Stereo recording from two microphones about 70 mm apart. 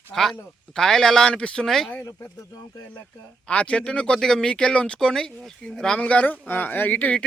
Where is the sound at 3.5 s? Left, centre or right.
Centre.